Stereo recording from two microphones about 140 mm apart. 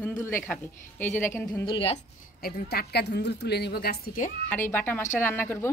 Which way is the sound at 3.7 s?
90° left.